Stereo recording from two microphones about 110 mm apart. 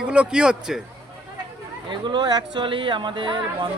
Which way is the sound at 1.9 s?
45° right (ahead or behind).